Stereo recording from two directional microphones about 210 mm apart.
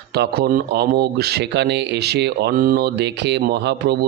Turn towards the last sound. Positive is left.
turn(degrees=-50)  # may be behind; listen again after turning